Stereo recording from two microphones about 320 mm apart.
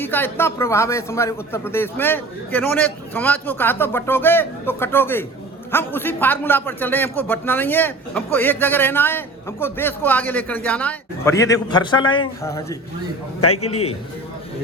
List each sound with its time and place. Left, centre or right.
0.0 s a man's voice: centre
13.4 s a man's voice: left